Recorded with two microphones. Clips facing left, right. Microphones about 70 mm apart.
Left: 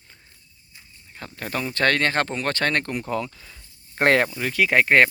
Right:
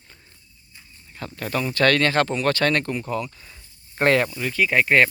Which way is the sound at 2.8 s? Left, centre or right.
Left.